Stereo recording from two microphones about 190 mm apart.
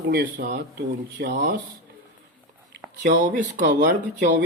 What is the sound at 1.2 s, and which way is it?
Speech, 65° right (ahead or behind).